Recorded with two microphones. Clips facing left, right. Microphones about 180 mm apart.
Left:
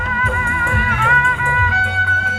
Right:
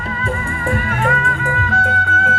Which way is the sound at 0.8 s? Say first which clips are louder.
Right 1 dB; 40° right (ahead or behind).